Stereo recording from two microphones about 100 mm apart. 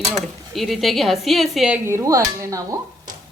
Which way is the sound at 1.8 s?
30° right (ahead or behind).